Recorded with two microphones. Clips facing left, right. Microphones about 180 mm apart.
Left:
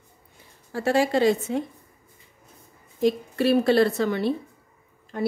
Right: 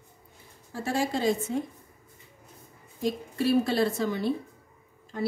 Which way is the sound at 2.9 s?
70° left (ahead or behind).